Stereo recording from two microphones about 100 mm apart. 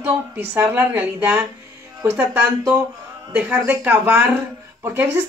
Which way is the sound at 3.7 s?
20° right (ahead or behind).